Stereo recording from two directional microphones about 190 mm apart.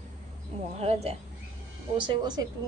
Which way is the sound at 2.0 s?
20° right (ahead or behind).